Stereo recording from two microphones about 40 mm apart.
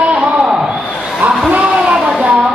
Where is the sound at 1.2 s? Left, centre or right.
Right.